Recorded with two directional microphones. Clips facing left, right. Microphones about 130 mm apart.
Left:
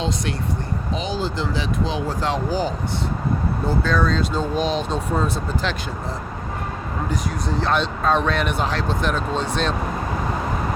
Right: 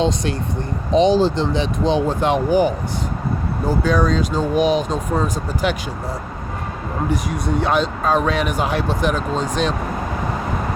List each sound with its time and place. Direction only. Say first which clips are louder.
0.9 s speech: right 12 dB; 30° right (ahead or behind)
2.2 s speech: right 6 dB; 20° right (ahead or behind)
7.6 s speech: right 1 dB; 5° right (ahead or behind)